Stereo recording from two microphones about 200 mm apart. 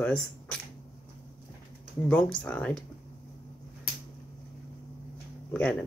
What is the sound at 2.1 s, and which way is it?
Speech, 5° left (ahead or behind).